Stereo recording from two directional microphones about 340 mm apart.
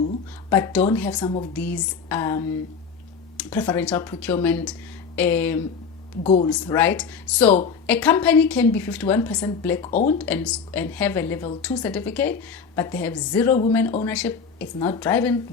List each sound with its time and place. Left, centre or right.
0.5 s a woman's voice: centre
6.2 s speech: centre
6.5 s a woman's voice: centre